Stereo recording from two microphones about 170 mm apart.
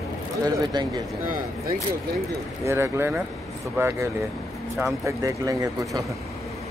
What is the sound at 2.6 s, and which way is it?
Speech, 15° right (ahead or behind).